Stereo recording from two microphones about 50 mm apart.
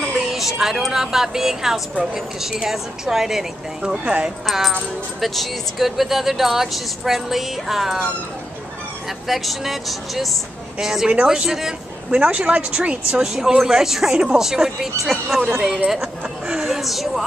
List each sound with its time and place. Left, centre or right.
0.3 s a woman's voice: centre
4.0 s speech: right
4.5 s a woman's voice: centre
9.3 s a woman's voice: centre
12.1 s a woman's voice: right; by 17.2 s centre